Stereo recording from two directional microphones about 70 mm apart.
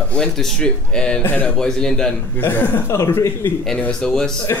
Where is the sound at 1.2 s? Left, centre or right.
Left.